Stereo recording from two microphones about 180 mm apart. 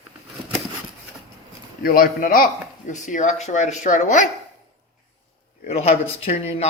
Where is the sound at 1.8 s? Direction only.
55° left (ahead or behind).